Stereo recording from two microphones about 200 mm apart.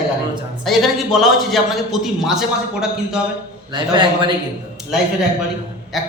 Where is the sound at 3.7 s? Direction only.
25° right (ahead or behind).